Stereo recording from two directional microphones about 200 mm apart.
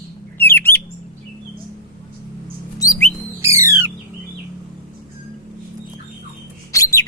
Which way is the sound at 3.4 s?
15° right (ahead or behind).